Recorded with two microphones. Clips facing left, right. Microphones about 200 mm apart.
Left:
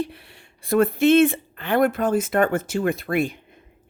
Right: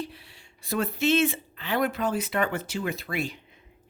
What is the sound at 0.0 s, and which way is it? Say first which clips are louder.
Speech: left 7 dB; 55° left (ahead or behind).